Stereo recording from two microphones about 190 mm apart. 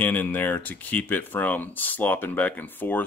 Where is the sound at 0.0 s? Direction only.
10° left (ahead or behind).